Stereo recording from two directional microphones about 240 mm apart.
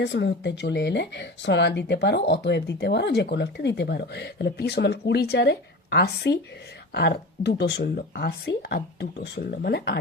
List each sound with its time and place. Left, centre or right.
0.0 s speech: left